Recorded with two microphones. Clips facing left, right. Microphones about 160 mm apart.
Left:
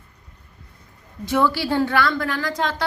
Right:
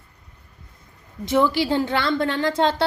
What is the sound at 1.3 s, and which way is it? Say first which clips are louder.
A woman's voice: right 1 dB; 20° right (ahead or behind).